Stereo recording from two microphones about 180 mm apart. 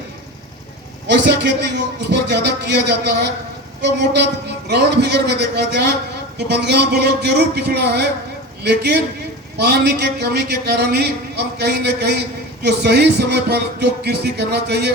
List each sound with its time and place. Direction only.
1.0 s a man's voice: 70° right (ahead or behind)